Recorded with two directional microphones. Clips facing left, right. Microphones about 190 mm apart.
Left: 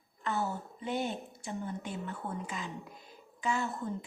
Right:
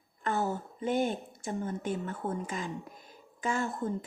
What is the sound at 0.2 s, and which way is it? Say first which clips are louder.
A woman's voice: right 3 dB; 45° right (ahead or behind).